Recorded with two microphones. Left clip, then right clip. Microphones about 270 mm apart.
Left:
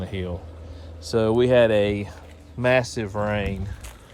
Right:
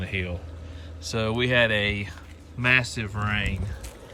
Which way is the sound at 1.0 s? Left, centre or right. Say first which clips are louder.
Left 6 dB; centre.